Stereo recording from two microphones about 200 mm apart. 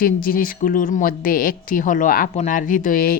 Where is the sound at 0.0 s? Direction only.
45° left (ahead or behind).